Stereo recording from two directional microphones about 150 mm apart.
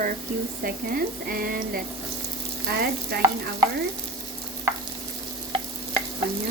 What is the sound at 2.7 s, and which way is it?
Frying, 90° right.